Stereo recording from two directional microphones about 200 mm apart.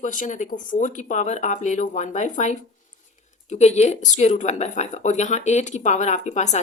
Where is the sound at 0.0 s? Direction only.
40° left (ahead or behind).